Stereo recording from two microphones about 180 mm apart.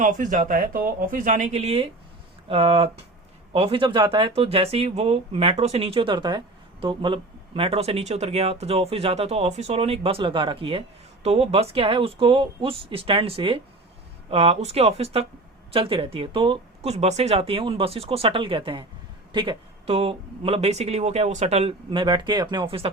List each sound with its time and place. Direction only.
0.0 s speech: 45° right (ahead or behind); by 22.9 s 30° right (ahead or behind)